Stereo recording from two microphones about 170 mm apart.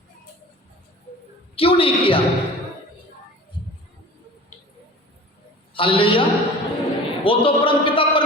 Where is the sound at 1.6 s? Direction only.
35° left (ahead or behind).